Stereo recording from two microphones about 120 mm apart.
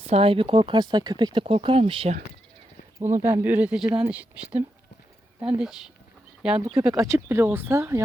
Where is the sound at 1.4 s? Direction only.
50° right (ahead or behind).